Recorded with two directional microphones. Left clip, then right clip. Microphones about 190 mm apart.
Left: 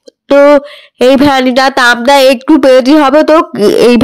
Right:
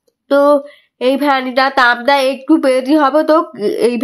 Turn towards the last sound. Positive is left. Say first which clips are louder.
# left 9 dB
turn(degrees=45)  # may be behind; listen again after turning